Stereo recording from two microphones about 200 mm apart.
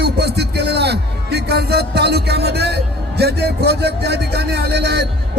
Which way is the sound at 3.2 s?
55° right (ahead or behind).